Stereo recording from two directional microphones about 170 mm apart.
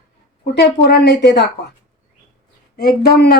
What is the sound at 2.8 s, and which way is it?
Speech, 70° left (ahead or behind).